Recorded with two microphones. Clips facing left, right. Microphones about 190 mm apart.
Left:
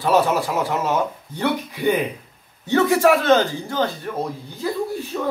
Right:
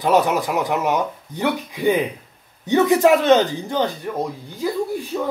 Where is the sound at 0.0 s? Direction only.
15° right (ahead or behind).